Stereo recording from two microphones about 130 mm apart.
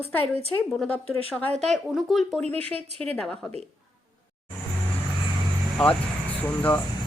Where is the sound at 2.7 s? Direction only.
50° right (ahead or behind).